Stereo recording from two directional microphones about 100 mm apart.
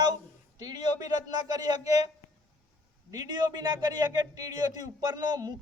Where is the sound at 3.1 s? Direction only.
40° right (ahead or behind).